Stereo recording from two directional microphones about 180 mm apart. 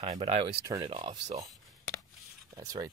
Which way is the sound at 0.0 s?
35° right (ahead or behind).